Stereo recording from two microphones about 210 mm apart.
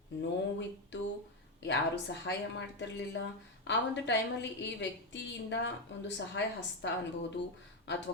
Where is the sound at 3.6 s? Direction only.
55° left (ahead or behind).